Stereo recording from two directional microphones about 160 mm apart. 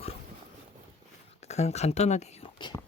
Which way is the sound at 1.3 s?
40° left (ahead or behind).